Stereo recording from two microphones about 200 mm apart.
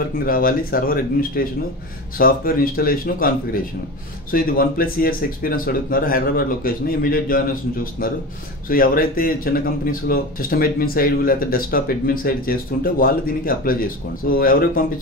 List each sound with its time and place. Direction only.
0.2 s speech: 45° left (ahead or behind)
4.3 s speech: 45° left (ahead or behind)
8.6 s speech: 45° left (ahead or behind)